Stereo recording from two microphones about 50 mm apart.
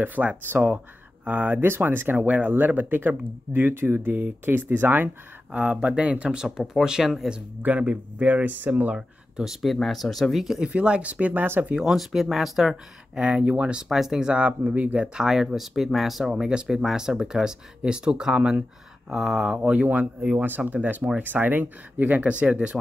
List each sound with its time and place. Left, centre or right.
0.0 s speech: right
2.1 s speech: right
5.5 s speech: right
7.6 s speech: right
9.4 s speech: centre
10.3 s speech: centre
10.6 s speech: right
11.7 s speech: centre; by 13.7 s right
13.8 s speech: centre
14.7 s speech: right
15.0 s speech: centre
19.6 s speech: right